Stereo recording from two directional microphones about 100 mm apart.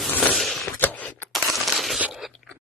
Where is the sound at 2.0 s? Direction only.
5° right (ahead or behind).